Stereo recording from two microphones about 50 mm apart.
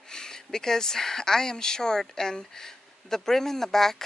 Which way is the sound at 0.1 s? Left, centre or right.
Centre.